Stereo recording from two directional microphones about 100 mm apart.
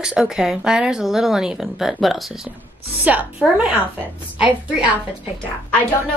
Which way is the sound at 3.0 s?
15° right (ahead or behind).